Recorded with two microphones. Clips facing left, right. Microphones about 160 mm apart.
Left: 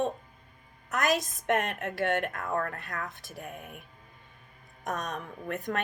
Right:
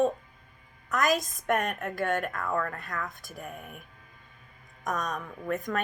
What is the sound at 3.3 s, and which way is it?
Speech, 25° left (ahead or behind).